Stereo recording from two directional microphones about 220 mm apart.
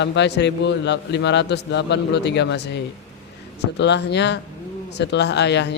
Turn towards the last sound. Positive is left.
turn(degrees=50)  # may be behind; listen again after turning